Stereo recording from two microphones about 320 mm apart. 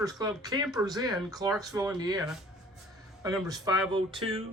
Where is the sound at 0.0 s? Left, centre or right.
Centre.